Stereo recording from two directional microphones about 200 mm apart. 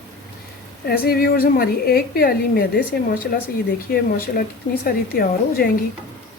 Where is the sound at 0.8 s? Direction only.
50° left (ahead or behind).